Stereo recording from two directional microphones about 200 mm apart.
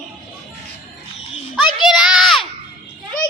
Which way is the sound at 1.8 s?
5° right (ahead or behind).